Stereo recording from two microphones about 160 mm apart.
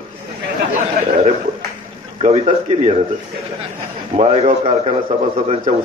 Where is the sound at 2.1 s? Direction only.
40° right (ahead or behind).